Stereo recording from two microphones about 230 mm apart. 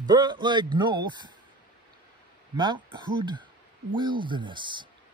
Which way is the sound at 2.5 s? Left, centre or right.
Centre.